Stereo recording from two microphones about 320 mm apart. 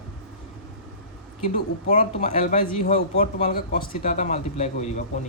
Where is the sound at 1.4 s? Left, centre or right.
Left.